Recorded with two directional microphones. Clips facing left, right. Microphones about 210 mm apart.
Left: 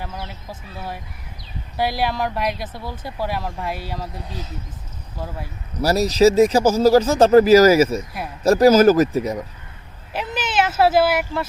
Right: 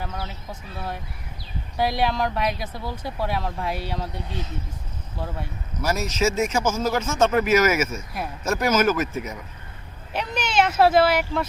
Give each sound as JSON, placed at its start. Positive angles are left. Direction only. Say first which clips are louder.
{"t": 0.0, "sound": "speech", "louder": "even", "side_deg": 0}
{"t": 5.8, "sound": "speech", "louder": "left 8 dB", "side_deg": 35}
{"t": 10.1, "sound": "speech", "louder": "left 1 dB", "side_deg": 0}